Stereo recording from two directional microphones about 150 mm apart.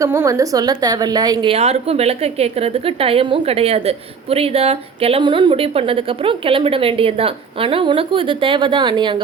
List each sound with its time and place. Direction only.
0.0 s a woman's voice: 20° right (ahead or behind)
1.5 s a woman's voice: 45° right (ahead or behind)